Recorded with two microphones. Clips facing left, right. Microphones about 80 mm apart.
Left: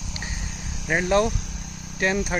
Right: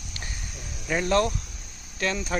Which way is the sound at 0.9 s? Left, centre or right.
Left.